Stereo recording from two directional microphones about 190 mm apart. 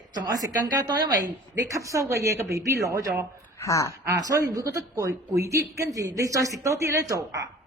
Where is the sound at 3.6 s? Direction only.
15° left (ahead or behind).